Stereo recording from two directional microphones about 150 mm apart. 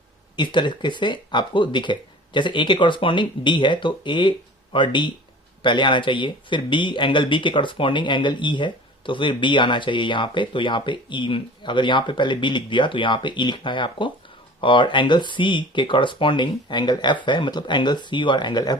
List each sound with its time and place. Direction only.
0.3 s speech: 30° left (ahead or behind)